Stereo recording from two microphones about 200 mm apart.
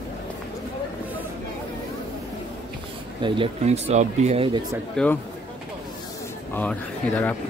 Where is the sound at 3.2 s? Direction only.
25° right (ahead or behind).